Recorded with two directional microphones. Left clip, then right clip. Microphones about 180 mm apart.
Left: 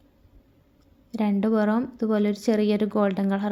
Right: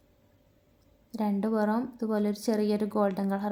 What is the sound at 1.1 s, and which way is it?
A woman's voice, 15° left (ahead or behind).